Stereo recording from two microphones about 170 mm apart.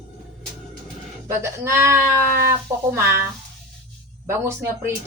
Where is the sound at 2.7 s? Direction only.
15° right (ahead or behind).